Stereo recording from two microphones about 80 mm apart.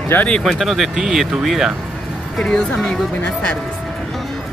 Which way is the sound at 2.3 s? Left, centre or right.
Centre.